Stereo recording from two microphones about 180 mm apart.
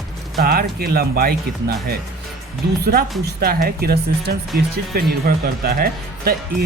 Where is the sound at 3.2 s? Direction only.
55° right (ahead or behind).